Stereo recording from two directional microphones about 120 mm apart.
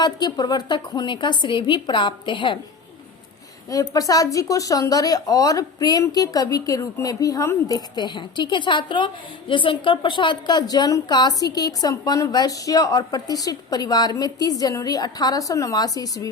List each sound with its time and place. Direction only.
0.0 s a woman's voice: 35° left (ahead or behind)
3.7 s a woman's voice: 30° left (ahead or behind)